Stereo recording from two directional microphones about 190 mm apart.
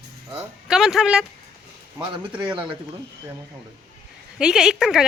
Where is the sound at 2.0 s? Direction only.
25° right (ahead or behind).